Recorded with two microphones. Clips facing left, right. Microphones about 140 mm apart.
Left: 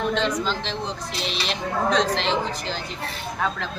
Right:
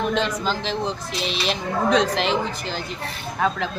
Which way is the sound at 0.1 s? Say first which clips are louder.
Right 1 dB; 5° right (ahead or behind).